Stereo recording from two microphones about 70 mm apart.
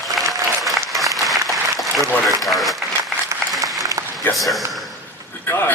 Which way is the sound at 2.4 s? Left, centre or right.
Centre.